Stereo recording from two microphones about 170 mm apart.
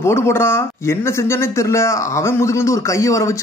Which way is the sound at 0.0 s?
15° left (ahead or behind).